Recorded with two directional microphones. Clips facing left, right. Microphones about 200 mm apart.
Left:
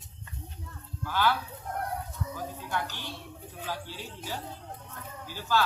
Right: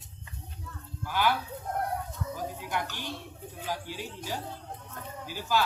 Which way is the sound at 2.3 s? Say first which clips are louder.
Right 1 dB; 15° right (ahead or behind).